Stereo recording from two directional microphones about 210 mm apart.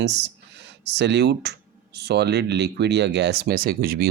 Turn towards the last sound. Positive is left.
turn(degrees=-45)  # may be behind; listen again after turning